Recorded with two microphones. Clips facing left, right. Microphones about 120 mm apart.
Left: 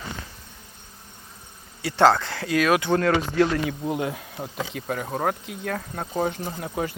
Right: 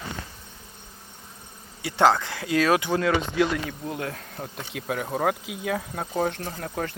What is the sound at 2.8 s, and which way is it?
Speech, 10° right (ahead or behind).